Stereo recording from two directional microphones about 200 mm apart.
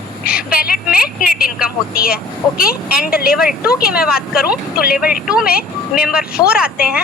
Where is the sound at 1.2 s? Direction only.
45° left (ahead or behind).